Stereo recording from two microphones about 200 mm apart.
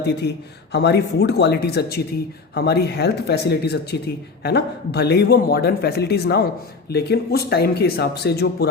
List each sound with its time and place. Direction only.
0.0 s a man's voice: 55° left (ahead or behind)